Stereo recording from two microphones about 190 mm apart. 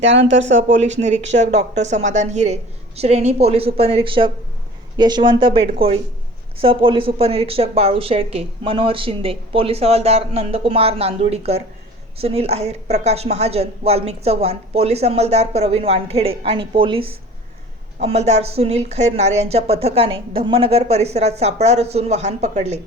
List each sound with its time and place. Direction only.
0.0 s speech: 70° right (ahead or behind)
0.5 s speech: 40° right (ahead or behind)